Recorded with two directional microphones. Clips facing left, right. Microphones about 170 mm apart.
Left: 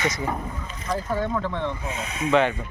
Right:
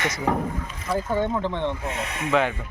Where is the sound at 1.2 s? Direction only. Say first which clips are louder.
Right 1 dB; 25° right (ahead or behind).